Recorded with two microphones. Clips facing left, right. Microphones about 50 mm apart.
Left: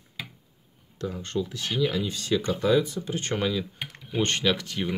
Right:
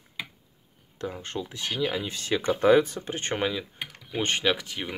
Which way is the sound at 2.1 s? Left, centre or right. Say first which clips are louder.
Even; right.